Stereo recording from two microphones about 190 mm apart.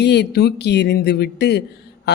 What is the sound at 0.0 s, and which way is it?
Speech, 60° left (ahead or behind).